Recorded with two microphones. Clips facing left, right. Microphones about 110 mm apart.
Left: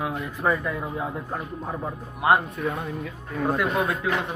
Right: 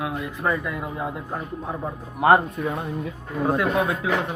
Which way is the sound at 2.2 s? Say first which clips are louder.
Right 4 dB; 50° right (ahead or behind).